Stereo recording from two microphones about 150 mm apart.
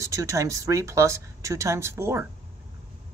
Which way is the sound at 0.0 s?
20° right (ahead or behind).